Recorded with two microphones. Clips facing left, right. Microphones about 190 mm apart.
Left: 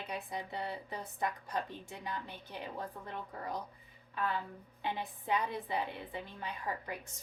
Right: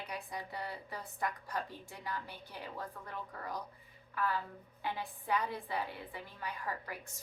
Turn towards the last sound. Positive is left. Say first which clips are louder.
# left 1 dB
turn(degrees=20)  # may be behind; listen again after turning